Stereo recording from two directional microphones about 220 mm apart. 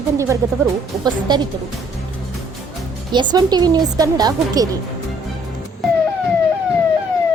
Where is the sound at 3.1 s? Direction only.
20° right (ahead or behind).